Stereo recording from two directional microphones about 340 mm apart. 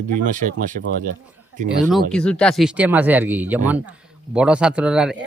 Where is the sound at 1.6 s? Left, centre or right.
Centre.